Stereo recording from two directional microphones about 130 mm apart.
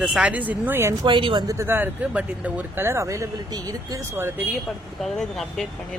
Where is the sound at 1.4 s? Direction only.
20° right (ahead or behind).